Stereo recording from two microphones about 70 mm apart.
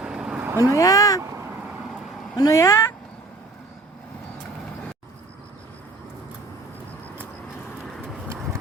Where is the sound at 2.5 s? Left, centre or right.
Left.